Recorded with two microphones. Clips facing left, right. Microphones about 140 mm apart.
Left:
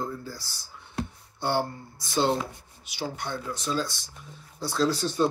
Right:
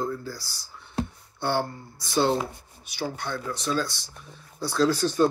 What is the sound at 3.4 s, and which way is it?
Speech, 60° right (ahead or behind).